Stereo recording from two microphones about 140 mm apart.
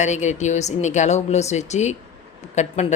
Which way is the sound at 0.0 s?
55° left (ahead or behind).